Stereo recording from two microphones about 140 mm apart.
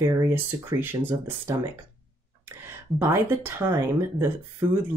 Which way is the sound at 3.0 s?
15° right (ahead or behind).